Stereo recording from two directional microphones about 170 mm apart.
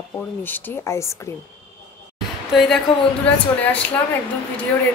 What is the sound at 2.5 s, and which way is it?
Speech, centre (ahead or behind).